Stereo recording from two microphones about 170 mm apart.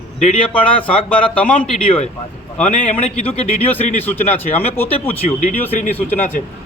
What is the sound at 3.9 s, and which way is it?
Speech, 10° left (ahead or behind).